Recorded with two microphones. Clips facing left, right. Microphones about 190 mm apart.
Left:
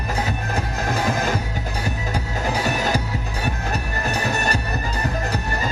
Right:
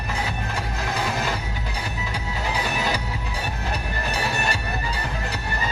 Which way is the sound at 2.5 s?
45° left (ahead or behind).